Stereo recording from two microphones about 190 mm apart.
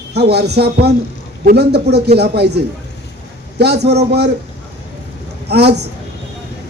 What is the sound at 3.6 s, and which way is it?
Speech, 60° right (ahead or behind).